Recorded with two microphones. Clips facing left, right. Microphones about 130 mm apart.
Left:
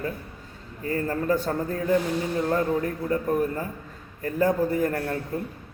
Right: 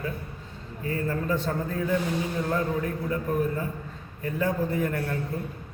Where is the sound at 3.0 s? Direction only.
40° left (ahead or behind).